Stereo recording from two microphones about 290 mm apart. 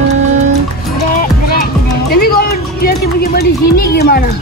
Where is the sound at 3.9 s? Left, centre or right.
Left.